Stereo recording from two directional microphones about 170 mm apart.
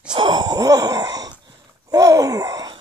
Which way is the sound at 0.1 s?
25° right (ahead or behind).